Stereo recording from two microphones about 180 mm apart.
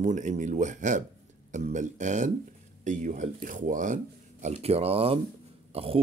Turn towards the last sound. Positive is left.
turn(degrees=-30)  # may be behind; listen again after turning